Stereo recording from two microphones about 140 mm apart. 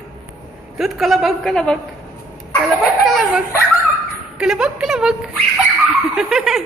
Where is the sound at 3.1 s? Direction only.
Centre (ahead or behind).